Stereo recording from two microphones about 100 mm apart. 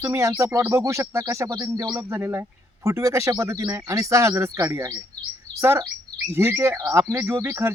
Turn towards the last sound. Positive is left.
turn(degrees=-25)  # may be behind; listen again after turning